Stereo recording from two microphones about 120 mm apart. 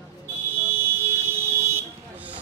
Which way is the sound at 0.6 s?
20° right (ahead or behind).